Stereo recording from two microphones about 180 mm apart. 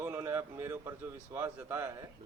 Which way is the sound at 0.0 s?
15° right (ahead or behind).